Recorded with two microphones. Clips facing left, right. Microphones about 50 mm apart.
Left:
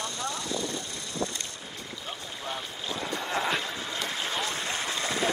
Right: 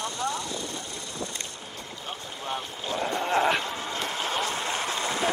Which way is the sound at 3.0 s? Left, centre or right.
Right.